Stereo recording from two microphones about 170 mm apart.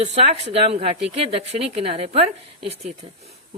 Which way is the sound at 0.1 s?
40° right (ahead or behind).